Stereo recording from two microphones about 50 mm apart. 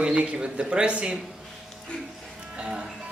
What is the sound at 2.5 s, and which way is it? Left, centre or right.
Music, centre.